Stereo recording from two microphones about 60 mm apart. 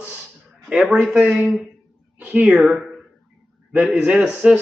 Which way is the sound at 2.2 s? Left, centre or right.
Right.